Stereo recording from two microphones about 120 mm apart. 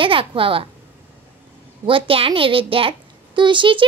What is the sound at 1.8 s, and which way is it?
A child's voice, 50° right (ahead or behind).